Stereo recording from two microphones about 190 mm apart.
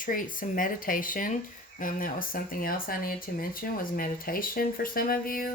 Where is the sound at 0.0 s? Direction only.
45° left (ahead or behind).